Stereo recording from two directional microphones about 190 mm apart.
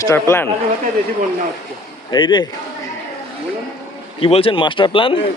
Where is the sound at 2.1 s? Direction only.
20° left (ahead or behind).